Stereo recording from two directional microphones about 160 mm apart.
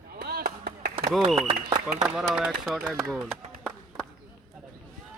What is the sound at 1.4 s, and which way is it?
Speech, 30° right (ahead or behind).